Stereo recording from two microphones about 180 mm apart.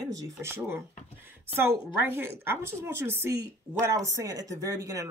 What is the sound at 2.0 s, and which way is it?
Speech, 10° right (ahead or behind).